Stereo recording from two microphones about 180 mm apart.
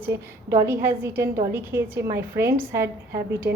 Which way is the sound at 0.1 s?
15° right (ahead or behind).